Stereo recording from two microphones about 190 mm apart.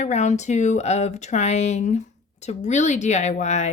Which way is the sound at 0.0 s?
35° left (ahead or behind).